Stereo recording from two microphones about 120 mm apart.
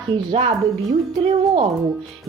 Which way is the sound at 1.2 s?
55° right (ahead or behind).